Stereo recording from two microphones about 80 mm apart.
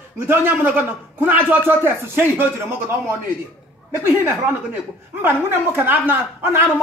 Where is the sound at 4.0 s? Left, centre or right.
Right.